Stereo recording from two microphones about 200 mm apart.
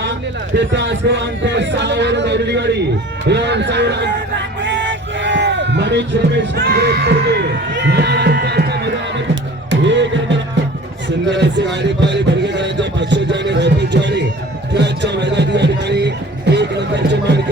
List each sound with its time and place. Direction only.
0.5 s a man's voice: 60° right (ahead or behind)
4.6 s a sound: 65° right (ahead or behind)
11.3 s music: 60° right (ahead or behind)